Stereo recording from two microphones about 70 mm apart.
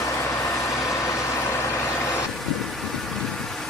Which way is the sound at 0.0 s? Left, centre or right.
Left.